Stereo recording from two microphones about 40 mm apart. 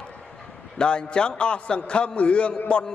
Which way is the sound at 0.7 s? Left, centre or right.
Left.